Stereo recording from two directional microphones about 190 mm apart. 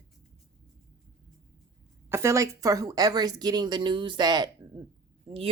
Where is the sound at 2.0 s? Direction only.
15° right (ahead or behind).